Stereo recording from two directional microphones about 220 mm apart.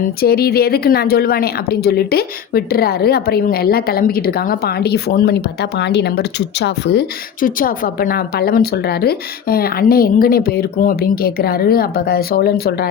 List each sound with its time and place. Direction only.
0.2 s a woman's voice: 45° left (ahead or behind)